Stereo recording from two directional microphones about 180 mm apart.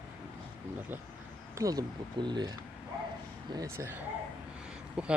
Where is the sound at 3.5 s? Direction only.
15° right (ahead or behind).